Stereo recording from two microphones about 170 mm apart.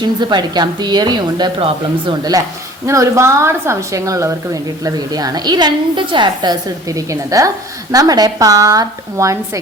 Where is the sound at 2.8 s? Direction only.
15° right (ahead or behind).